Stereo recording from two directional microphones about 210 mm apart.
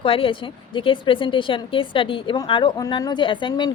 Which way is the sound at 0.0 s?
25° left (ahead or behind).